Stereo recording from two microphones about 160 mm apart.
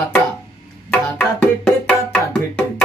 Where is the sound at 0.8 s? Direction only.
5° left (ahead or behind).